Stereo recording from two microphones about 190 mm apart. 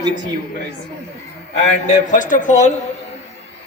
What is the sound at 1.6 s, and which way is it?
A man's voice, 40° left (ahead or behind).